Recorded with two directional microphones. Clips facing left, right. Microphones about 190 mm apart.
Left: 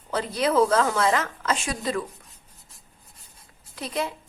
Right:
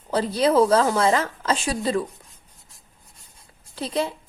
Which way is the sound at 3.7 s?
30° right (ahead or behind).